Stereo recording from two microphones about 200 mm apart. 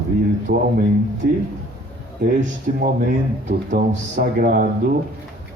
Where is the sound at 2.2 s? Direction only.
50° right (ahead or behind).